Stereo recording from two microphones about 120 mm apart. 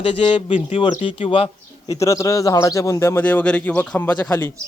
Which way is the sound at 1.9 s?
25° left (ahead or behind).